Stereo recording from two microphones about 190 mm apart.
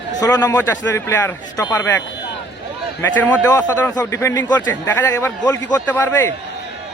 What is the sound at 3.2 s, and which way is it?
A man's voice, 10° left (ahead or behind).